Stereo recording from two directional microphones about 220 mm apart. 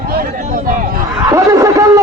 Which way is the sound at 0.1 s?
40° right (ahead or behind).